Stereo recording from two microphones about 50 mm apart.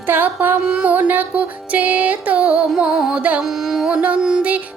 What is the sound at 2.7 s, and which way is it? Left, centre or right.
Music, centre.